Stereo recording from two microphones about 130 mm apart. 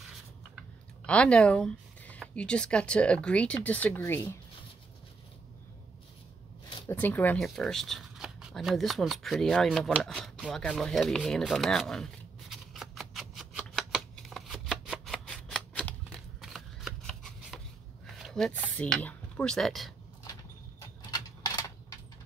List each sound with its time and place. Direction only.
1.0 s speech: 10° left (ahead or behind)
4.0 s speech: 20° left (ahead or behind)
6.9 s speech: 15° left (ahead or behind)
7.3 s shuffling cards: centre (ahead or behind)
18.0 s a sound: centre (ahead or behind)
19.0 s speech: 10° left (ahead or behind)
20.8 s a sound: 30° left (ahead or behind)